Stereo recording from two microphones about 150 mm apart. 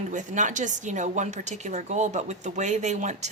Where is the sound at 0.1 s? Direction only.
55° right (ahead or behind).